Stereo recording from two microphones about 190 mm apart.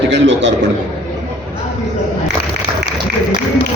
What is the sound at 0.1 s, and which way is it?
Speech, 70° right (ahead or behind).